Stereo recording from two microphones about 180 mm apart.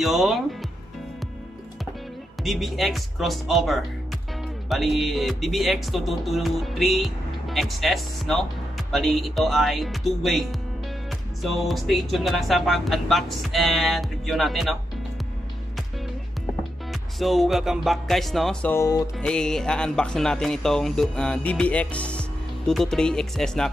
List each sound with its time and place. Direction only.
0.0 s speech: centre (ahead or behind)
2.4 s music: centre (ahead or behind)
16.9 s music: centre (ahead or behind); by 19.0 s 20° left (ahead or behind)
19.1 s music: 5° left (ahead or behind)